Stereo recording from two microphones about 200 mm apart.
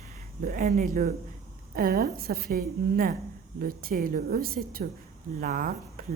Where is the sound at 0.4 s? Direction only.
45° right (ahead or behind).